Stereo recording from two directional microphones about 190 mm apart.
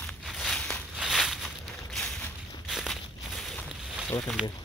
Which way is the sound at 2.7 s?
Centre (ahead or behind).